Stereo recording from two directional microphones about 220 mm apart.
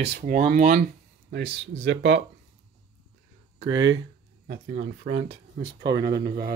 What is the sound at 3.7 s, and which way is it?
Speech, 60° right (ahead or behind).